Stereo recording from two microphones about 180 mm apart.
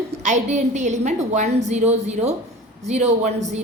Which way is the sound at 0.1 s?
40° right (ahead or behind).